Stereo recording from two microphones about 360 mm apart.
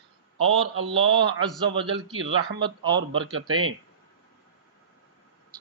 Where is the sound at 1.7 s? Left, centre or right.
Centre.